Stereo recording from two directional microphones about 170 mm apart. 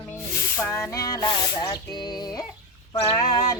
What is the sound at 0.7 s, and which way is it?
Music, 20° left (ahead or behind).